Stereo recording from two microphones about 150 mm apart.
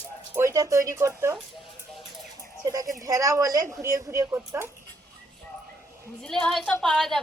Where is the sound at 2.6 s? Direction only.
20° right (ahead or behind).